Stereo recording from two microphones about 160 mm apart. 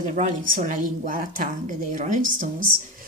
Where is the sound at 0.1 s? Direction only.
50° right (ahead or behind).